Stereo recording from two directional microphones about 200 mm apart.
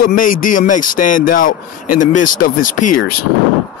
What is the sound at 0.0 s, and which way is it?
A man's voice, 45° left (ahead or behind).